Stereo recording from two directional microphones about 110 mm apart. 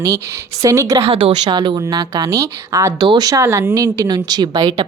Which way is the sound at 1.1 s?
50° right (ahead or behind).